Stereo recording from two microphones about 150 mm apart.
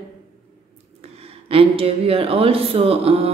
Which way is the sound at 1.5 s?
40° right (ahead or behind).